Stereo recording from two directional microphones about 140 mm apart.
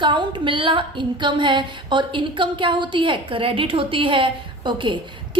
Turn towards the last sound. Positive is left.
turn(degrees=-35)  # may be behind; listen again after turning